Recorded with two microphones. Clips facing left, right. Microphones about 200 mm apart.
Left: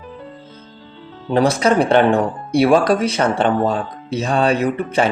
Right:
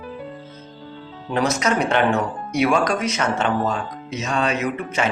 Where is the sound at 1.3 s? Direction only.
30° left (ahead or behind).